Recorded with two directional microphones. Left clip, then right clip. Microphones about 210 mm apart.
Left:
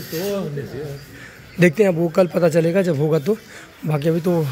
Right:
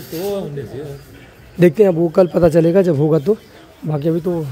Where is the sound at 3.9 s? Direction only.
20° right (ahead or behind).